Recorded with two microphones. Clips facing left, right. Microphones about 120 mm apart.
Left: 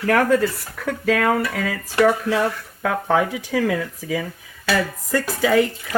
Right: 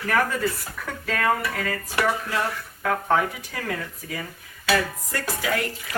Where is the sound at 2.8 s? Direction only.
90° left.